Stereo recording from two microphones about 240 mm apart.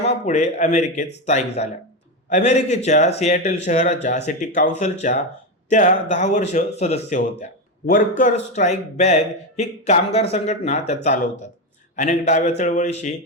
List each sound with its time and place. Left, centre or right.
0.0 s speech: left